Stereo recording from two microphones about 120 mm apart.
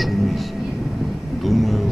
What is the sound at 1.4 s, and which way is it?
Speech, centre (ahead or behind).